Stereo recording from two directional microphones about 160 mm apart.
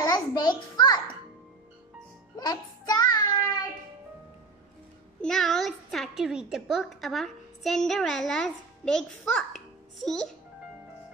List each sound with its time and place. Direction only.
0.0 s a sound: 25° left (ahead or behind)
2.3 s child singing: 25° left (ahead or behind)
5.2 s a woman's voice: 5° left (ahead or behind)